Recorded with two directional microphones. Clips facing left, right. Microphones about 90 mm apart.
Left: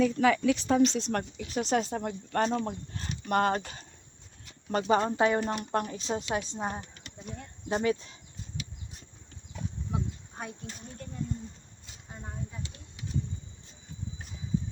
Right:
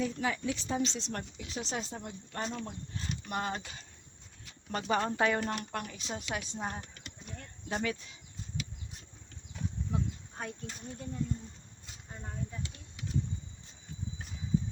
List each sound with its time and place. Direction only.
0.0 s speech: 80° left; by 3.8 s 45° left (ahead or behind)
4.7 s speech: 30° left (ahead or behind)
5.7 s speech: 35° left (ahead or behind)
9.9 s cricket: 10° left (ahead or behind)